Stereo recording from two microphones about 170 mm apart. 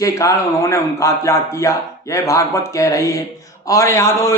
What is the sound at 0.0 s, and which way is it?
Speech, 20° left (ahead or behind).